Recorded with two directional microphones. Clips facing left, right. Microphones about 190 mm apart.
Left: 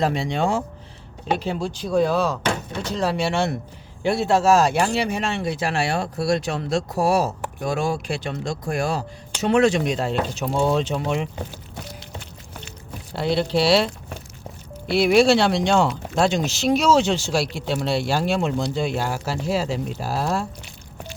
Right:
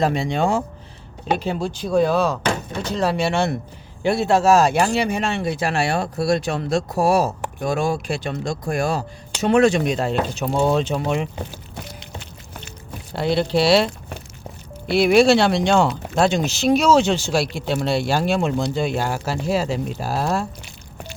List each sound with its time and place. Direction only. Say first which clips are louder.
0.0 s speech: right 2 dB; 50° right (ahead or behind)
13.1 s speech: right 2 dB; 55° right (ahead or behind)